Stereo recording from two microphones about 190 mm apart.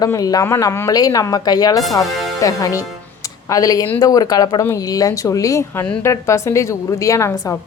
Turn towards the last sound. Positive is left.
turn(degrees=15)  # may be behind; listen again after turning